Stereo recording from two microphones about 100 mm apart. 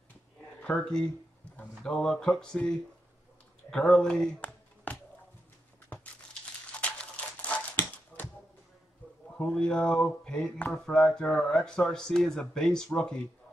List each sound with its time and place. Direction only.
0.6 s speech: 10° left (ahead or behind)
1.6 s mantra: 10° left (ahead or behind)
4.9 s a sound: 15° left (ahead or behind)
7.4 s dog: 15° left (ahead or behind)
9.4 s mantra: 10° left (ahead or behind)
10.9 s speech: 5° left (ahead or behind)